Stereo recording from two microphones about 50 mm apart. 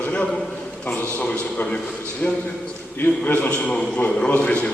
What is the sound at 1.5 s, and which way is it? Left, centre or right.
Speech, left.